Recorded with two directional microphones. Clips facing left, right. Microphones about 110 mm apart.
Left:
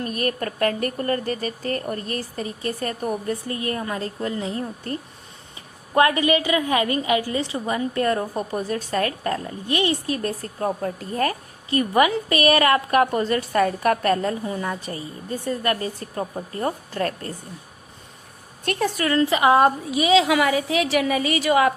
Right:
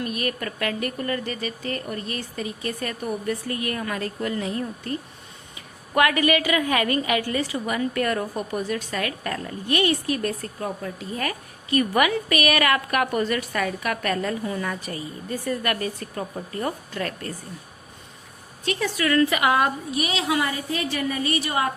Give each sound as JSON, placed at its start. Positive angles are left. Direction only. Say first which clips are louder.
{"t": 0.0, "sound": "a woman's voice", "louder": "left 2 dB", "side_deg": 40}
{"t": 18.6, "sound": "a woman's voice", "louder": "left 2 dB", "side_deg": 50}
{"t": 19.0, "sound": "a woman's voice", "louder": "left 2 dB", "side_deg": 30}
{"t": 20.3, "sound": "a woman's voice", "louder": "left 5 dB", "side_deg": 90}